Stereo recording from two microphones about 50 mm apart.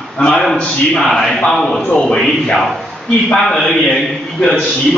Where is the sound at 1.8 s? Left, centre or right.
Centre.